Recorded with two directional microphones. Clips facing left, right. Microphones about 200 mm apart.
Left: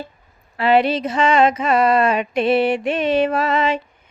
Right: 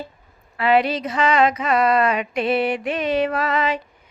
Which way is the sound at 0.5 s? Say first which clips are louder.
Left 2 dB; 30° left (ahead or behind).